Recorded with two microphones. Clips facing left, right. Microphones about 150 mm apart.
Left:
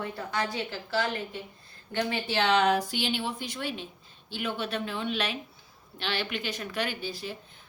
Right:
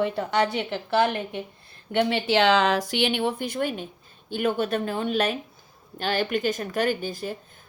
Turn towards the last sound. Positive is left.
turn(degrees=-50)  # may be behind; listen again after turning